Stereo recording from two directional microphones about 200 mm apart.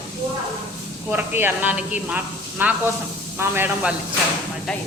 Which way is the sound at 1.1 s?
10° right (ahead or behind).